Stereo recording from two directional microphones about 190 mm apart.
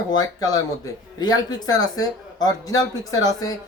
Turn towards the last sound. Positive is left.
turn(degrees=20)  # may be behind; listen again after turning